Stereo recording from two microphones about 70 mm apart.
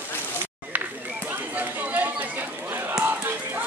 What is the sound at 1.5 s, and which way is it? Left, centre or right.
Chatter, right.